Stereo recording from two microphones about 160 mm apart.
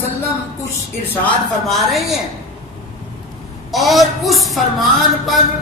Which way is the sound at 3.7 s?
Centre (ahead or behind).